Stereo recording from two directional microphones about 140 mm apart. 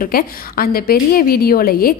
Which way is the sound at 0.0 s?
90° left.